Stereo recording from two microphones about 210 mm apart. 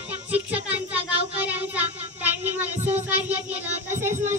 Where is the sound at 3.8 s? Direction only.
35° right (ahead or behind).